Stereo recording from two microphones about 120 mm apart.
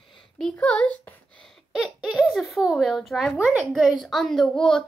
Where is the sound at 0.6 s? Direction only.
10° left (ahead or behind).